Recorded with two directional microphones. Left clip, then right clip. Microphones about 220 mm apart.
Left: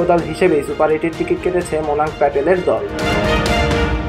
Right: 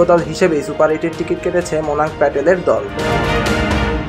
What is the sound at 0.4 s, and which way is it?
Speech, 20° right (ahead or behind).